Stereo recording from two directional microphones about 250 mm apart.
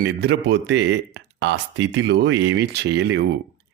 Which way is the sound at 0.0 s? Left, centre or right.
Right.